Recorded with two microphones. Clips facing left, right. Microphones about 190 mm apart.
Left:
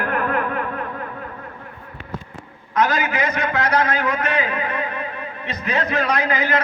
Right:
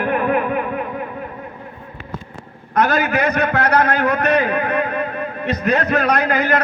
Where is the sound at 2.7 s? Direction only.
60° right (ahead or behind).